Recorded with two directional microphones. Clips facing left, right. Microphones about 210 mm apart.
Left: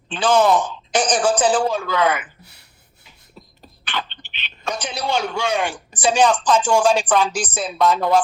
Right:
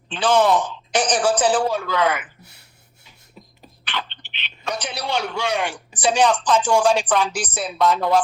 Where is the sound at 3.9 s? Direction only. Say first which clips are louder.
Left 2 dB; 45° left (ahead or behind).